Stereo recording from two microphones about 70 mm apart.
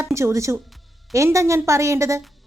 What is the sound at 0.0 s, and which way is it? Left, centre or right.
A woman's voice, right.